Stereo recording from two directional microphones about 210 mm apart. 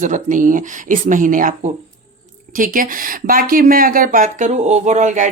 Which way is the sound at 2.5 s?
40° right (ahead or behind).